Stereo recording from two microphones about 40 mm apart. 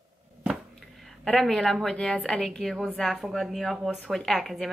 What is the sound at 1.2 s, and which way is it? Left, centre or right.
A woman's voice, centre.